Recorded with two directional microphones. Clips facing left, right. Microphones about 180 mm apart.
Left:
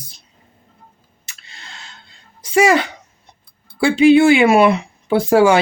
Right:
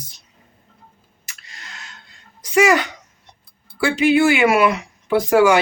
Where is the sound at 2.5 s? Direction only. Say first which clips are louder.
Left 2 dB; 30° left (ahead or behind).